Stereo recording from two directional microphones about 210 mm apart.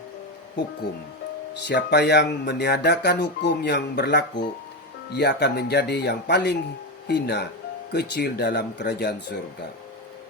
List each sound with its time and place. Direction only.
1.6 s speech: 50° left (ahead or behind)